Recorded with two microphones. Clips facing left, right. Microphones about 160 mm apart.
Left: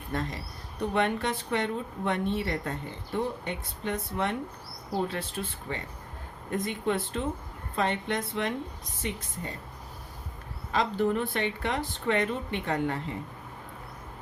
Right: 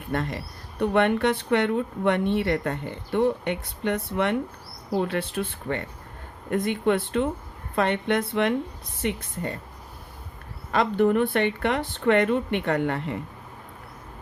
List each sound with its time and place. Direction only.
0.1 s speech: 65° right (ahead or behind)
10.7 s speech: 60° right (ahead or behind)